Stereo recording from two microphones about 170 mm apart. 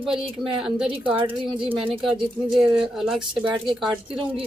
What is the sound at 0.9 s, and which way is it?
Speech, 30° right (ahead or behind).